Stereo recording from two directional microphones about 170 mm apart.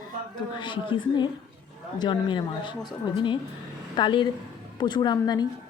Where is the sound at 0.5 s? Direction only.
30° left (ahead or behind).